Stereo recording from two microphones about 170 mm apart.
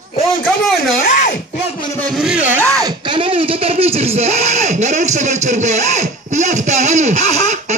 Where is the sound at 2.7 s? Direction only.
25° right (ahead or behind); by 7.8 s 40° right (ahead or behind).